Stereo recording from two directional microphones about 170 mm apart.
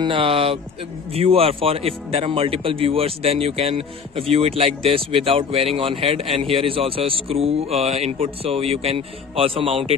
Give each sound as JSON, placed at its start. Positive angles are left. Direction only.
{"t": 0.0, "sound": "a man's voice", "side_deg": -30}